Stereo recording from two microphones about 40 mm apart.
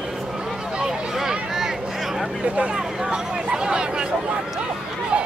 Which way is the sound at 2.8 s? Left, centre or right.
Centre.